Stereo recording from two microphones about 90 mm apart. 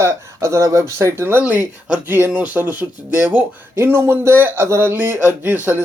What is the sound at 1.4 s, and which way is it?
Speech, 15° right (ahead or behind).